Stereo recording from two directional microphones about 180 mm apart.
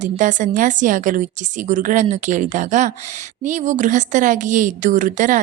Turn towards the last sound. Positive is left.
turn(degrees=-45)  # may be behind; listen again after turning